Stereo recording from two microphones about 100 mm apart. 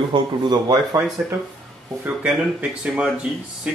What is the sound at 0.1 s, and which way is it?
Speech, 45° right (ahead or behind).